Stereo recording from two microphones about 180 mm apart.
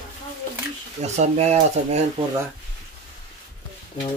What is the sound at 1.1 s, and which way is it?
Speech, 40° right (ahead or behind).